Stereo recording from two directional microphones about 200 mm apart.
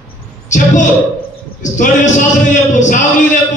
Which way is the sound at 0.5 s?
40° left (ahead or behind).